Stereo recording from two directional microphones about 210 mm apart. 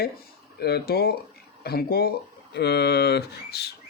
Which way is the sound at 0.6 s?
50° left (ahead or behind).